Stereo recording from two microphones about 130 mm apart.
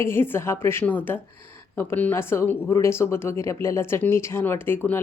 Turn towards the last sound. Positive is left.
turn(degrees=15)  # may be behind; listen again after turning